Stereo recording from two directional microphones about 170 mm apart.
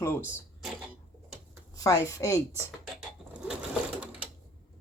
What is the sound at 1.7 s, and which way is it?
Speech, 20° left (ahead or behind).